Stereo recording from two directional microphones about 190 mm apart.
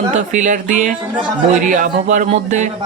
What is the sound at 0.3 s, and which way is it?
A man's voice, 40° right (ahead or behind).